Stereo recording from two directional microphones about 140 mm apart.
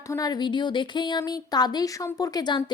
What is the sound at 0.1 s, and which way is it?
Speech, 25° left (ahead or behind).